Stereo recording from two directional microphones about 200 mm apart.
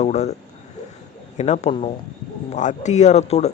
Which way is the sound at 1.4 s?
35° left (ahead or behind).